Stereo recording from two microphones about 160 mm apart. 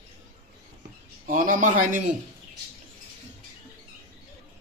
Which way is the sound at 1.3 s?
55° right (ahead or behind).